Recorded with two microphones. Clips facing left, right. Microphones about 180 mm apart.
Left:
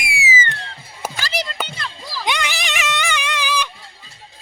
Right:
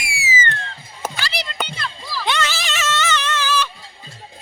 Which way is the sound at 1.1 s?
45° left (ahead or behind).